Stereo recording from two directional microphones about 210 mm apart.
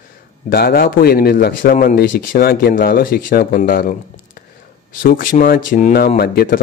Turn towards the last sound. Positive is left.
turn(degrees=50)  # may be behind; listen again after turning